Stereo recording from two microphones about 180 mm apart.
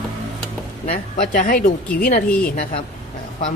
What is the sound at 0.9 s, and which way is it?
Speech, 50° left (ahead or behind).